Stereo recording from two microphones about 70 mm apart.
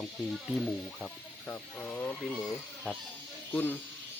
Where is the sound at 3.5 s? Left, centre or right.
Left.